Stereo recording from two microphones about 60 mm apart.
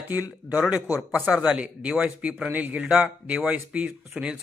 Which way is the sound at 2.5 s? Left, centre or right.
Right.